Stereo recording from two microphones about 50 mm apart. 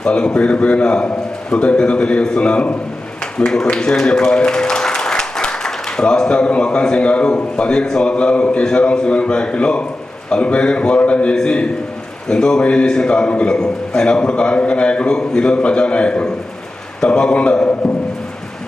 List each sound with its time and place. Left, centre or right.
0.0 s a man's voice: centre
4.0 s applause: centre
7.5 s a man's voice: centre